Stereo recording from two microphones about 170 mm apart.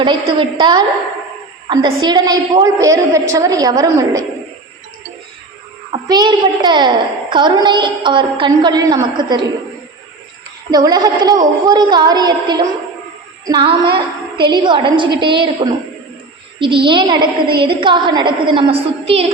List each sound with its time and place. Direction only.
0.0 s a woman's voice: 30° right (ahead or behind)
6.1 s a woman's voice: 25° right (ahead or behind)
10.7 s a woman's voice: 25° right (ahead or behind)